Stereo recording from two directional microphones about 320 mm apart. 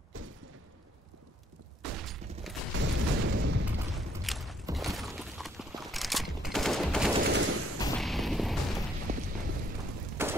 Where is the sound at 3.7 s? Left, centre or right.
Centre.